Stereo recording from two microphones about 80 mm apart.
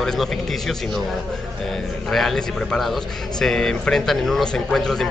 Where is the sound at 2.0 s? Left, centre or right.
Centre.